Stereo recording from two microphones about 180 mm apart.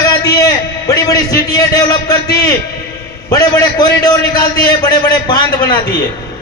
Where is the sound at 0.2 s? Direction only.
20° left (ahead or behind).